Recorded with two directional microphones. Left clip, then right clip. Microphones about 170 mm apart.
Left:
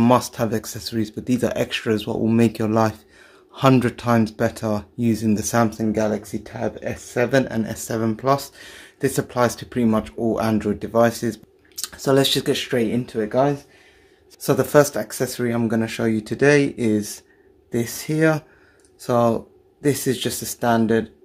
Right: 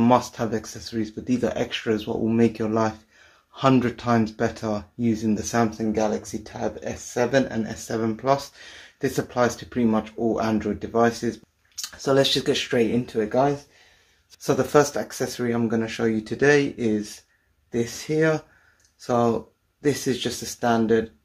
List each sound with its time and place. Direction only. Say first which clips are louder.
0.0 s speech: left 2 dB; 45° left (ahead or behind); by 13.5 s 25° left (ahead or behind)
14.4 s speech: left 3 dB; 45° left (ahead or behind)